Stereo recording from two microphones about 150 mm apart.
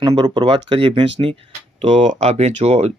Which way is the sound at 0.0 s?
30° right (ahead or behind).